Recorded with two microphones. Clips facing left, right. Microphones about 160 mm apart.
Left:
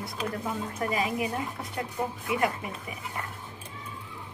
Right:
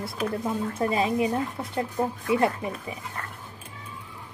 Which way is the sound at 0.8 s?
30° right (ahead or behind).